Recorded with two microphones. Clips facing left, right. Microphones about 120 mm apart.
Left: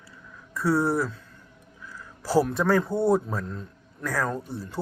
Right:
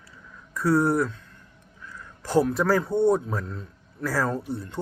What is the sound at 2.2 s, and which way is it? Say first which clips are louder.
A man's voice: right 1 dB; 5° left (ahead or behind).